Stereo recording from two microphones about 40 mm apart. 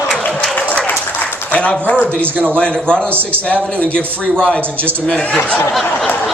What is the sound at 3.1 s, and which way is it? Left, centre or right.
Speech, right.